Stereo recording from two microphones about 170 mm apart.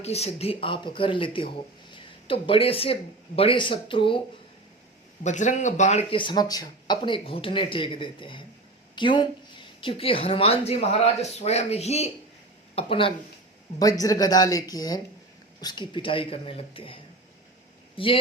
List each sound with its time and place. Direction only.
0.0 s speech: 40° left (ahead or behind)
5.2 s speech: 45° left (ahead or behind)
13.7 s speech: 20° left (ahead or behind)